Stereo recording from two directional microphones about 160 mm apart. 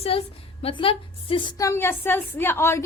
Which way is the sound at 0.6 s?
35° left (ahead or behind).